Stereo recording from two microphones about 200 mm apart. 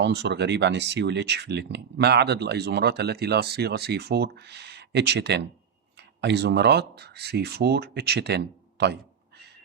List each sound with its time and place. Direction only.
0.0 s speech: 60° right (ahead or behind)